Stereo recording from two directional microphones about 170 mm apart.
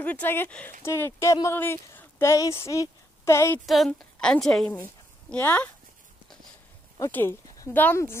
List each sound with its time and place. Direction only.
0.0 s speech: 10° left (ahead or behind)
3.6 s a woman's voice: centre (ahead or behind)
7.0 s speech: 15° left (ahead or behind)